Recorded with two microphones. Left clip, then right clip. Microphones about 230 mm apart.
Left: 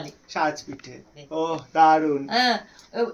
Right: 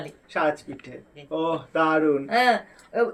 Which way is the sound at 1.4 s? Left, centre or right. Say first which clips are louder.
Left 4 dB; left.